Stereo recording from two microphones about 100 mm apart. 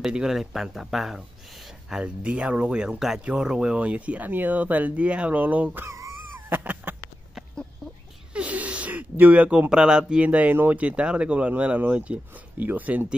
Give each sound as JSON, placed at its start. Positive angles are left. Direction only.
{"t": 0.0, "sound": "speech", "side_deg": -5}
{"t": 5.9, "sound": "a sound", "side_deg": -30}
{"t": 6.5, "sound": "cat", "side_deg": -15}
{"t": 8.3, "sound": "speech", "side_deg": -15}